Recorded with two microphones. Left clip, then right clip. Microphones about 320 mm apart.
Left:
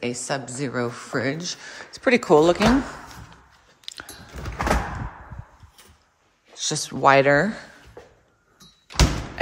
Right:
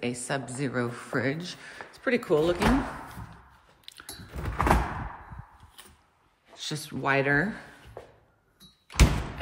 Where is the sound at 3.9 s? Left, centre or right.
Centre.